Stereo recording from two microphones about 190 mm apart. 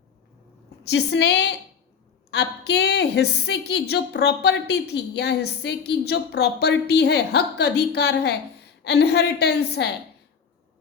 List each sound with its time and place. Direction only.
0.9 s a woman's voice: 60° left (ahead or behind)